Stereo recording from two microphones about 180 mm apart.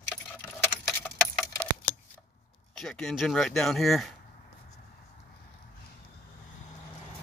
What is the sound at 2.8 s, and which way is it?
Speech, 5° left (ahead or behind).